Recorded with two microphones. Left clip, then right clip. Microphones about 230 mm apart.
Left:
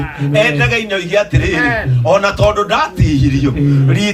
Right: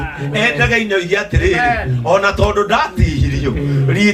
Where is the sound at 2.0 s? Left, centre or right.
Left.